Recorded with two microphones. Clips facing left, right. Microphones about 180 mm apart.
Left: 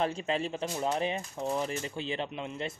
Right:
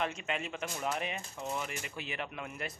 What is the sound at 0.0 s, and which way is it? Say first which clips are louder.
Speech: left 5 dB; 30° left (ahead or behind).